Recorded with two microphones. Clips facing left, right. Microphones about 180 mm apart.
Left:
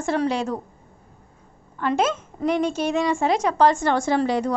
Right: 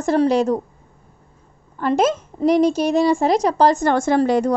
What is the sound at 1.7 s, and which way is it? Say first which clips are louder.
A woman's voice: right 4 dB; 40° right (ahead or behind).